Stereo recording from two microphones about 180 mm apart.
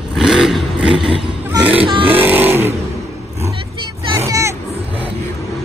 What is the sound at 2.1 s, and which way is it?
Vehicle, 10° right (ahead or behind).